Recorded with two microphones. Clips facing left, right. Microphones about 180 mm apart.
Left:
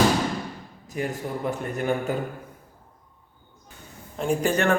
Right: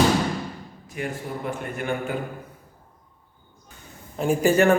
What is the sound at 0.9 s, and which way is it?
Speech, 40° left (ahead or behind).